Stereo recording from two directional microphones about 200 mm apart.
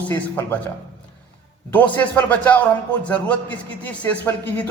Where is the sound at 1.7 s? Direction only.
10° left (ahead or behind).